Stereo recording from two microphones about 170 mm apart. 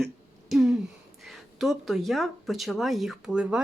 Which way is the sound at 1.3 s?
Centre (ahead or behind).